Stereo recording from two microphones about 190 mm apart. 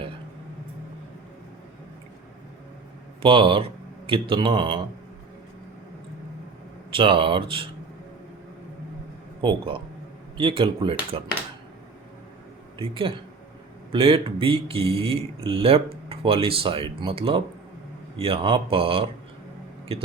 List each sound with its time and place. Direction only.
3.2 s speech: 25° right (ahead or behind)
6.9 s speech: 25° right (ahead or behind)
9.4 s speech: 25° right (ahead or behind)
12.8 s speech: 30° right (ahead or behind)